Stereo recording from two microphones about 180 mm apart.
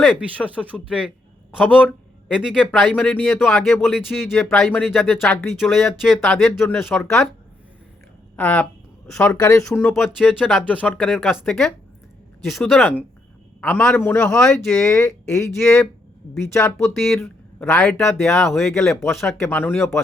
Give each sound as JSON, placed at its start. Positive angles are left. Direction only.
{"t": 0.4, "sound": "a man's voice", "side_deg": -10}
{"t": 8.4, "sound": "speech", "side_deg": 5}
{"t": 9.3, "sound": "speech", "side_deg": 15}
{"t": 9.8, "sound": "speech", "side_deg": 0}
{"t": 14.3, "sound": "speech", "side_deg": 0}
{"t": 14.8, "sound": "speech", "side_deg": 15}
{"t": 16.7, "sound": "speech", "side_deg": 0}
{"t": 17.2, "sound": "speech", "side_deg": 10}
{"t": 19.5, "sound": "speech", "side_deg": 10}